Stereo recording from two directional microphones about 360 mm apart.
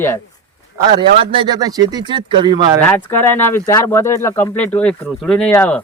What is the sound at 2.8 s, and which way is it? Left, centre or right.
A man's voice, centre.